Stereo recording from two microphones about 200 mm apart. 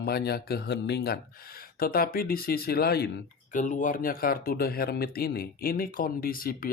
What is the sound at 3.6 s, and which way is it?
Speech, 40° left (ahead or behind).